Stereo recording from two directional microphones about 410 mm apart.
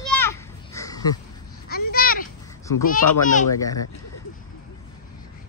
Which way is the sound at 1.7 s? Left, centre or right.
Left.